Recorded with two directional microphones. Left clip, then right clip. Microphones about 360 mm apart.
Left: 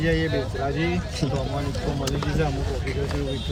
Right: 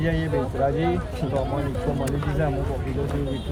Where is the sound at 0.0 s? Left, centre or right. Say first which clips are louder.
Left 3 dB; centre.